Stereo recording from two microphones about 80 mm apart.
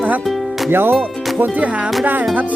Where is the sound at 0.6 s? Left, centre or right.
Right.